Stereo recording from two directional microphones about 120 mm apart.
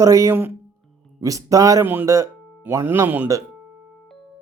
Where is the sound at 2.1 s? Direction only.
25° right (ahead or behind).